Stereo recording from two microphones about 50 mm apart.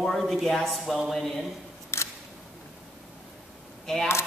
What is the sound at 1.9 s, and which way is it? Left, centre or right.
Single-lens reflex camera, left.